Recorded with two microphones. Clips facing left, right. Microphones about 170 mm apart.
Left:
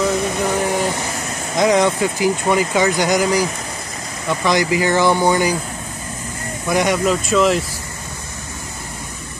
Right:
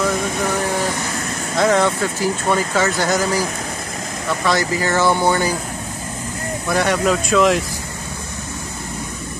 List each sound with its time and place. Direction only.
0.5 s a sound: 15° left (ahead or behind)
1.6 s speech: 15° left (ahead or behind)
4.5 s speech: 15° left (ahead or behind)
6.7 s speech: 15° left (ahead or behind)
7.1 s speech: centre (ahead or behind)